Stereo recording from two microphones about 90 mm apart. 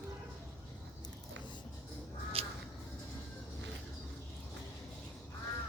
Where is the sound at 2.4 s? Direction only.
90° right.